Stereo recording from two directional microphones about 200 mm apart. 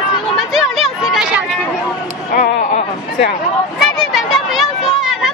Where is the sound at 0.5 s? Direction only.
Centre (ahead or behind).